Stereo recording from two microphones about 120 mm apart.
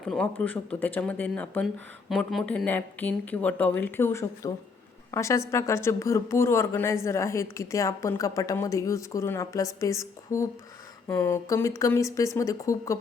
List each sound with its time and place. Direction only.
0.0 s speech: 5° left (ahead or behind)
1.6 s speech: centre (ahead or behind)
2.5 s a woman's voice: 10° left (ahead or behind)